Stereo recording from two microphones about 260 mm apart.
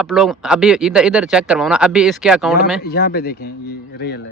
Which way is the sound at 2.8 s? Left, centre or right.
Left.